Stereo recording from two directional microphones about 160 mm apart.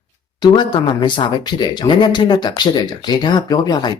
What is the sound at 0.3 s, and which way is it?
Speech, 25° left (ahead or behind).